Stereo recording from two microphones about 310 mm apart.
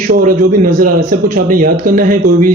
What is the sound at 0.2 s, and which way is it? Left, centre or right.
Speech, right.